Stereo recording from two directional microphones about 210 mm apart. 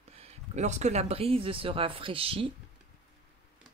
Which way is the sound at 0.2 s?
35° right (ahead or behind).